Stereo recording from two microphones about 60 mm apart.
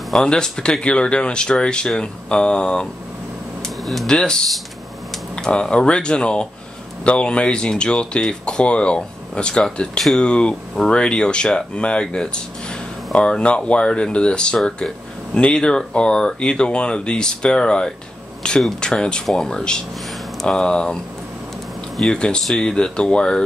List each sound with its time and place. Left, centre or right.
0.1 s speech: centre
3.6 s a sound: centre
4.1 s speech: centre
10.3 s speech: centre
22.1 s speech: centre